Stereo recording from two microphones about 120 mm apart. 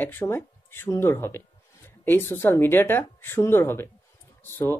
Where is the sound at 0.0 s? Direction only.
20° left (ahead or behind).